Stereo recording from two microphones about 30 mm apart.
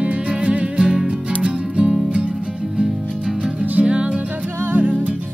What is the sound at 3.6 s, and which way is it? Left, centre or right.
Music, right.